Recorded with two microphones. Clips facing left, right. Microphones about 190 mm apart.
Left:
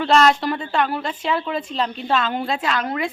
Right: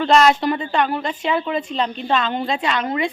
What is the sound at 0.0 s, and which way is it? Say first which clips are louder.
Speech: right 2 dB; centre (ahead or behind).